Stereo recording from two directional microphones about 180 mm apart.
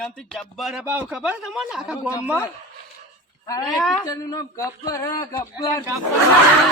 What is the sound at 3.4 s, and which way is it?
Speech, 20° left (ahead or behind).